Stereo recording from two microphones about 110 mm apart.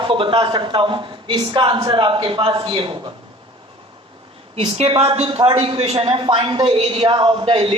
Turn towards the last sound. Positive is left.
turn(degrees=-55)  # may be behind; listen again after turning